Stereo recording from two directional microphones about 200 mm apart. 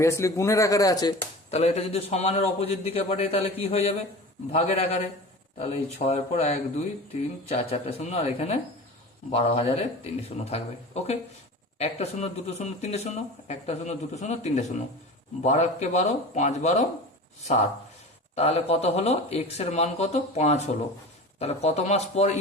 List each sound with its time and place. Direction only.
0.0 s speech: 15° left (ahead or behind)
1.5 s speech: 30° left (ahead or behind)
18.3 s speech: 30° left (ahead or behind)